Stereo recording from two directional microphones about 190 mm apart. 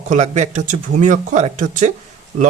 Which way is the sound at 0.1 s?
40° right (ahead or behind).